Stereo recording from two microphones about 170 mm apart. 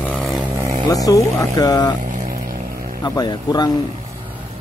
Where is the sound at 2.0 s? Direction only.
50° right (ahead or behind).